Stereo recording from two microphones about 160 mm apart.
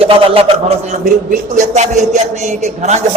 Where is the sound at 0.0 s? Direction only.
35° right (ahead or behind).